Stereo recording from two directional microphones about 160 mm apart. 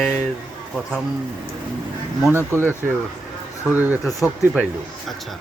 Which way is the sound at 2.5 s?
15° right (ahead or behind).